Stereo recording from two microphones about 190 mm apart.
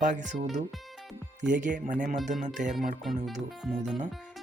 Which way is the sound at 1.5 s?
45° right (ahead or behind).